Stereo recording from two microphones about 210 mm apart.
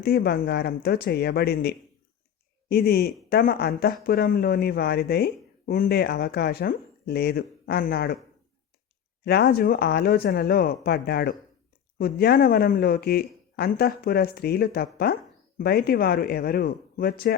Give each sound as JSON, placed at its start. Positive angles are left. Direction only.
{"t": 0.0, "sound": "speech", "side_deg": 50}
{"t": 9.2, "sound": "speech", "side_deg": 50}